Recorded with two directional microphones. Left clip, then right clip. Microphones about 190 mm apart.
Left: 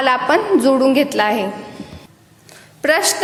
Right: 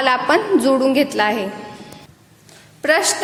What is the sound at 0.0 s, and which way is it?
A woman's voice, centre (ahead or behind).